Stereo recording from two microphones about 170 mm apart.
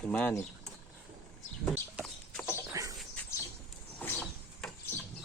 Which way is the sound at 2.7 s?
20° right (ahead or behind).